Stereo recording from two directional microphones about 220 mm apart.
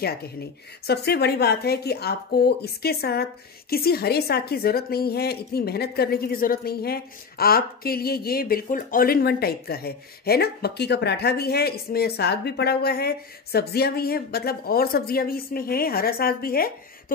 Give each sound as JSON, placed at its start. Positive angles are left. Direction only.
{"t": 0.0, "sound": "a woman's voice", "side_deg": 45}